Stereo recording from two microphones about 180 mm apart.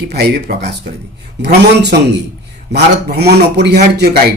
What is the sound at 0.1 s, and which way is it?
Speech, 65° right (ahead or behind).